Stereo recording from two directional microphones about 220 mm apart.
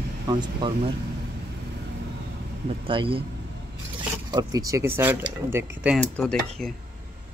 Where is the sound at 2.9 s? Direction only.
25° right (ahead or behind).